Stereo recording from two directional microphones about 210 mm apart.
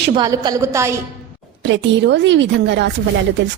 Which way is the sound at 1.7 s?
60° right (ahead or behind).